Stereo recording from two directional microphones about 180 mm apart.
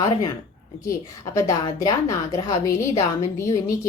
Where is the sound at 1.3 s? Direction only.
20° left (ahead or behind).